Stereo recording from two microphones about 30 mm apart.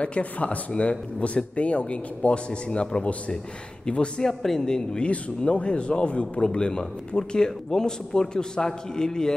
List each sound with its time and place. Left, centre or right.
0.0 s speech: left
4.2 s a man's voice: centre
5.0 s speech: left
6.4 s a man's voice: left